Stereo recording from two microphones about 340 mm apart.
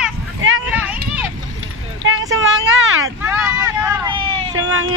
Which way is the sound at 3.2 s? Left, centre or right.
Centre.